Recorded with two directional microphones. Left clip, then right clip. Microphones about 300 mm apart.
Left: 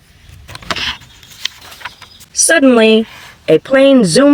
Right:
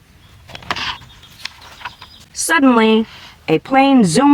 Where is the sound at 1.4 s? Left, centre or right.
Left.